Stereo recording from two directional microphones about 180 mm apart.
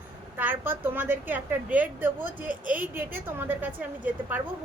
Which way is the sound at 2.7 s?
10° right (ahead or behind).